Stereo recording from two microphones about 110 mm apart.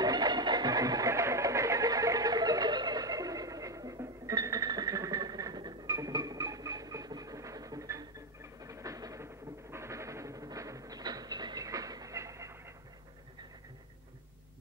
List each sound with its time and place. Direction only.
0.0 s train: 40° right (ahead or behind)